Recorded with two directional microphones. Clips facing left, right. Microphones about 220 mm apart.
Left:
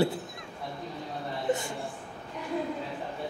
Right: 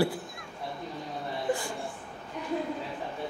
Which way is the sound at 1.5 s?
20° left (ahead or behind).